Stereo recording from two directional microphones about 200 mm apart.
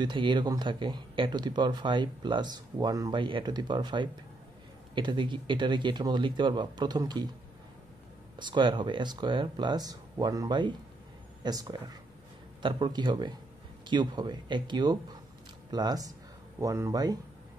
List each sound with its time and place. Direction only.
0.0 s speech: 25° right (ahead or behind)
8.4 s speech: 25° right (ahead or behind)